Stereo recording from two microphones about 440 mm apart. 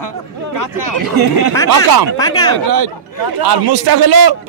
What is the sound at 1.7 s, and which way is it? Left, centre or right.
Speech, right.